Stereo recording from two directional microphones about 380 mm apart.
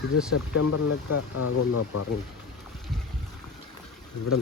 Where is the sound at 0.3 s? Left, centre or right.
Left.